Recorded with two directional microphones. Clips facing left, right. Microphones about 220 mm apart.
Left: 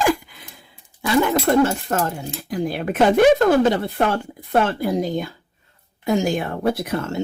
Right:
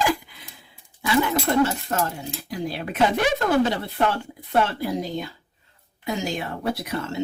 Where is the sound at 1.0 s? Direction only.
50° left (ahead or behind).